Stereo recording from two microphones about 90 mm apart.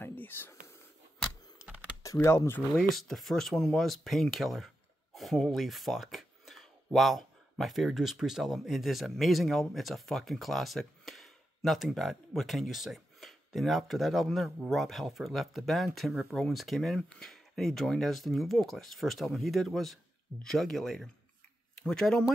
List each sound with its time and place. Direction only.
0.0 s whispering: 20° left (ahead or behind)
2.0 s speech: 30° left (ahead or behind)
2.7 s speech: centre (ahead or behind)